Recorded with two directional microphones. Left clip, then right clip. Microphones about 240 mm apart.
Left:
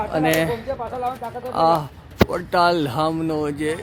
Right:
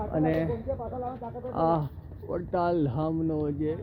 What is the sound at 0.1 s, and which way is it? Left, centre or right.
Speech, centre.